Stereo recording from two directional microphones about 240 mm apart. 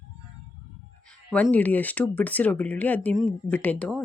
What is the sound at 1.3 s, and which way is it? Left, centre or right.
Speech, centre.